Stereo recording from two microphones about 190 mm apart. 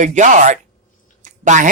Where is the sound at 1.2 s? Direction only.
40° right (ahead or behind).